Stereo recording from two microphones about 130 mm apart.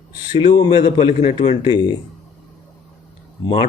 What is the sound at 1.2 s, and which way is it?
Speech, 50° left (ahead or behind).